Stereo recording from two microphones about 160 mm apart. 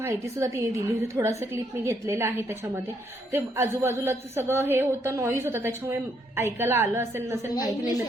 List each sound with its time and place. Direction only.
0.0 s a woman's voice: 20° right (ahead or behind)
7.5 s a woman's voice: 25° left (ahead or behind)